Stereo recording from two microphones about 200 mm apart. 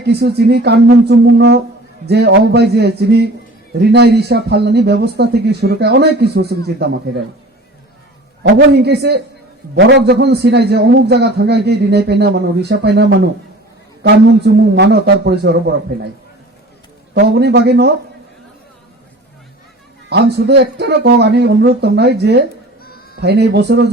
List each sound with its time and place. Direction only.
0.1 s a man's voice: 55° right (ahead or behind)
8.4 s a man's voice: 55° right (ahead or behind)
17.2 s a man's voice: 55° right (ahead or behind)
20.1 s a man's voice: 55° right (ahead or behind)
22.8 s a sound: 50° left (ahead or behind)
23.2 s a man's voice: 55° right (ahead or behind)